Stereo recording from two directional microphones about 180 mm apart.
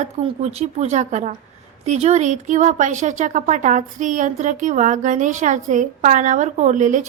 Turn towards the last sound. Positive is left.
turn(degrees=-45)  # may be behind; listen again after turning